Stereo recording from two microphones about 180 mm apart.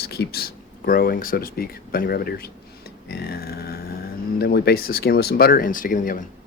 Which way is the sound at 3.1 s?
60° left (ahead or behind).